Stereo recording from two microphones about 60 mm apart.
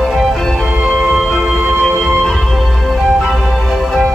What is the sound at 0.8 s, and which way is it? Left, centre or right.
Music, centre.